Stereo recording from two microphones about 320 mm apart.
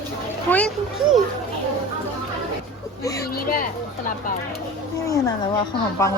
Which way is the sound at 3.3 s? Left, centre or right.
Left.